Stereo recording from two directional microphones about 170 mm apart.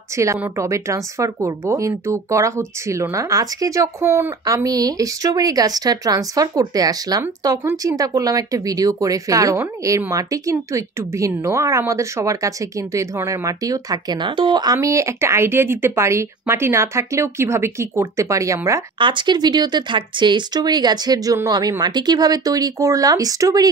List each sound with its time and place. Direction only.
0.2 s speech: 15° right (ahead or behind)
18.9 s speech: 30° right (ahead or behind)